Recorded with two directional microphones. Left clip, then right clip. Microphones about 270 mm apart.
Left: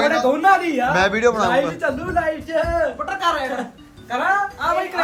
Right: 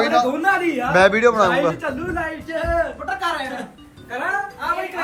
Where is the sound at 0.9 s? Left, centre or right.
Centre.